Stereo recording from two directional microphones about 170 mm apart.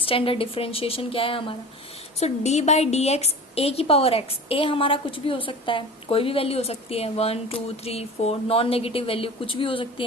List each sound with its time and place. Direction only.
0.0 s a woman's voice: 35° left (ahead or behind)